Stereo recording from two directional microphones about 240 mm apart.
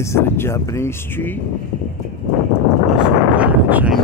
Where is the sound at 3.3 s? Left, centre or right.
Centre.